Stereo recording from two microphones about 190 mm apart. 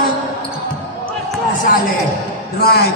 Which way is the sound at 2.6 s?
55° left (ahead or behind).